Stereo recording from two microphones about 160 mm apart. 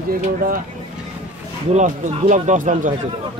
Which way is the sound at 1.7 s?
50° right (ahead or behind).